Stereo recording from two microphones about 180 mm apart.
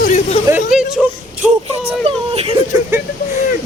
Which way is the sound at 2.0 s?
30° right (ahead or behind).